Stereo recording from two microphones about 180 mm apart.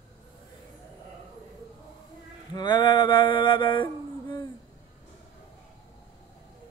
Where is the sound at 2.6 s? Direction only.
25° left (ahead or behind).